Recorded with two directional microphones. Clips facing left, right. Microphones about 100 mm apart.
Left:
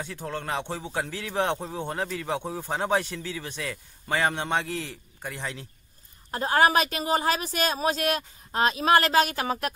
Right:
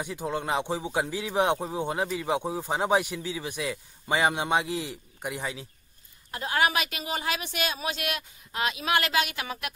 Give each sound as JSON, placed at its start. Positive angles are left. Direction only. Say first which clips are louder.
{"t": 0.0, "sound": "speech", "louder": "right 3 dB", "side_deg": -15}
{"t": 6.3, "sound": "a woman's voice", "louder": "left 5 dB", "side_deg": 40}